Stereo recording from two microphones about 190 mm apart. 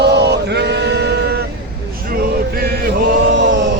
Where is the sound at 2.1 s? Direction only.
50° right (ahead or behind).